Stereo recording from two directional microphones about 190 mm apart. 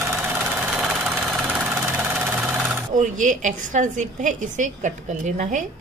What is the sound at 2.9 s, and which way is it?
A woman's voice, 40° right (ahead or behind).